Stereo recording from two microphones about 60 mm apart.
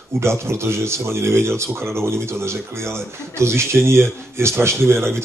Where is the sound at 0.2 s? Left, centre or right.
Right.